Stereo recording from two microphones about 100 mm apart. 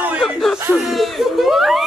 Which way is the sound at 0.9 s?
Centre (ahead or behind).